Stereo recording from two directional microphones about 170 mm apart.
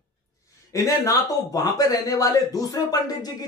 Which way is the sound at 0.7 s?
20° left (ahead or behind).